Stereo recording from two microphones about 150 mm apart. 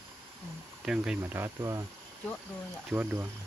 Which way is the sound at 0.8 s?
5° right (ahead or behind).